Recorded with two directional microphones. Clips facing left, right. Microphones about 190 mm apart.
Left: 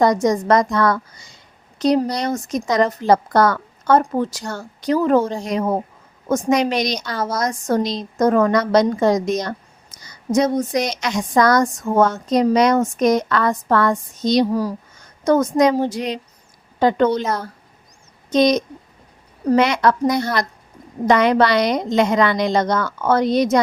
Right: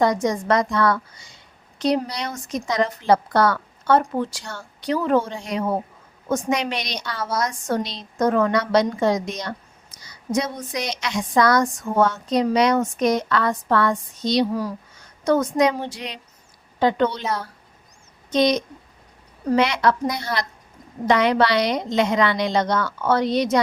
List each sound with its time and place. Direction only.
0.0 s a woman's voice: 40° left (ahead or behind)